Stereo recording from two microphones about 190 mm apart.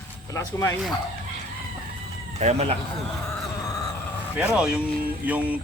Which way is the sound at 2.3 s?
35° right (ahead or behind).